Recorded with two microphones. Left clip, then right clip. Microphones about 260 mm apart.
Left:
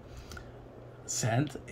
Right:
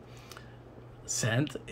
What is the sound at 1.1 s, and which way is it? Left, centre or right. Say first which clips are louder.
Speech: right 1 dB; centre.